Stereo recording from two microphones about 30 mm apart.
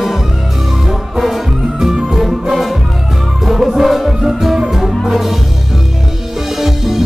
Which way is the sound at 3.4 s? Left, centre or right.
Centre.